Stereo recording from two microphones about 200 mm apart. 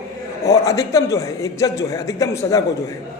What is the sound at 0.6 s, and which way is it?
A man's voice, 15° left (ahead or behind).